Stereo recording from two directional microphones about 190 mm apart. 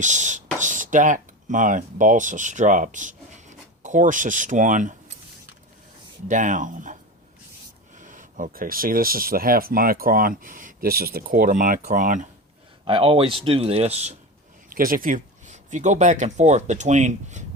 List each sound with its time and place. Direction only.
0.0 s speech: 40° right (ahead or behind)
6.2 s speech: 40° right (ahead or behind)
7.9 s speech: 45° right (ahead or behind)
12.8 s speech: 25° right (ahead or behind)
14.7 s speech: 50° right (ahead or behind)